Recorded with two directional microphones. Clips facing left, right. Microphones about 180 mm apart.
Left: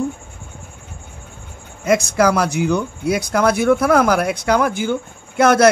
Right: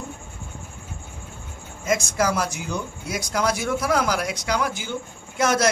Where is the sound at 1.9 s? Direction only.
65° left (ahead or behind).